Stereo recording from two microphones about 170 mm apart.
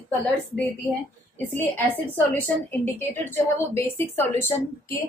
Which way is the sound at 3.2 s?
15° left (ahead or behind).